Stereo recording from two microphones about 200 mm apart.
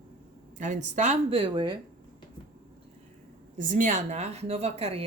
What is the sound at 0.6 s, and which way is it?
Speech, 35° right (ahead or behind).